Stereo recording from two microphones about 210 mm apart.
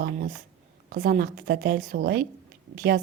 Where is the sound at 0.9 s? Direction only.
40° right (ahead or behind).